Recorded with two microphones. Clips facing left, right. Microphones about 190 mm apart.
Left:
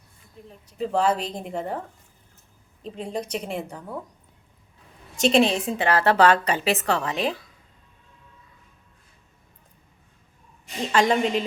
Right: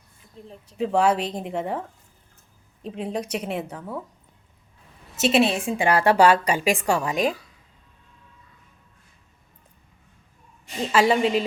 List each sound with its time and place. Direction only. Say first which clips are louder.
0.4 s a woman's voice: right 2 dB; 30° right (ahead or behind)
0.8 s a woman's voice: right 2 dB; 10° right (ahead or behind)
2.8 s a woman's voice: right 2 dB; 5° right (ahead or behind)
5.1 s a woman's voice: left 1 dB; 5° right (ahead or behind)
10.9 s a woman's voice: right 2 dB; 5° right (ahead or behind)